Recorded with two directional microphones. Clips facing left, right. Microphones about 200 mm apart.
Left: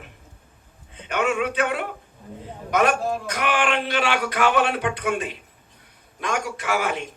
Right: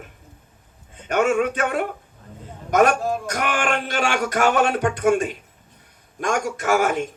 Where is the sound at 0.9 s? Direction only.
45° right (ahead or behind).